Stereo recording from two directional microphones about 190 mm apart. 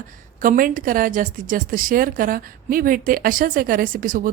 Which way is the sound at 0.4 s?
45° right (ahead or behind).